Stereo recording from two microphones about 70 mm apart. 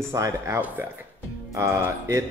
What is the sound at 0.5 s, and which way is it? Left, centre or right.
Speech, right.